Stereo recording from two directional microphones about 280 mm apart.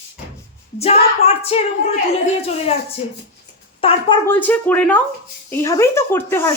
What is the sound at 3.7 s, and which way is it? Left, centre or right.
Speech, centre.